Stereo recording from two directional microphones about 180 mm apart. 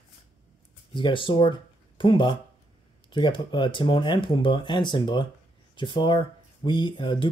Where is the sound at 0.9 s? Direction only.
30° left (ahead or behind).